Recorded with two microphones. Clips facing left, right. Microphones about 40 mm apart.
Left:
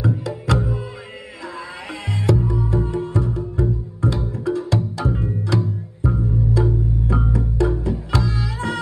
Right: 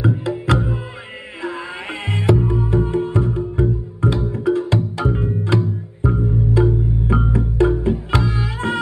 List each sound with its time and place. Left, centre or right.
0.0 s music: right